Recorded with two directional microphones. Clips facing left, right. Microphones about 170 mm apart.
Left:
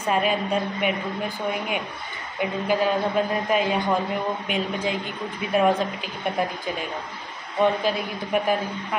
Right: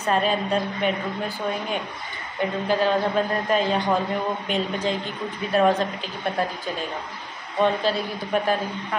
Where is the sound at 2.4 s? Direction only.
10° left (ahead or behind).